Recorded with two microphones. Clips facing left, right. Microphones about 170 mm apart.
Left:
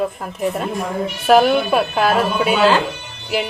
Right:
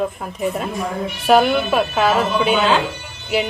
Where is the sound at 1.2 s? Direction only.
Centre (ahead or behind).